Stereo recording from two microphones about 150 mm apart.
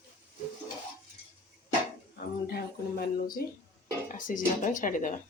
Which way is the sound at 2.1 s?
90° left.